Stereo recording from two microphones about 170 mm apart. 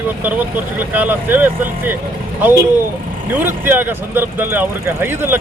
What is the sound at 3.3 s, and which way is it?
Speech, 10° right (ahead or behind).